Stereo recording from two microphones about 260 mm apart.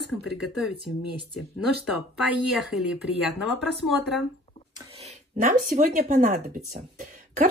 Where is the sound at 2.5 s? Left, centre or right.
Centre.